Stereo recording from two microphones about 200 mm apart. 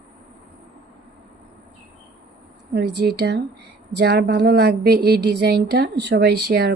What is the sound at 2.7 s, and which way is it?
Speech, 55° right (ahead or behind).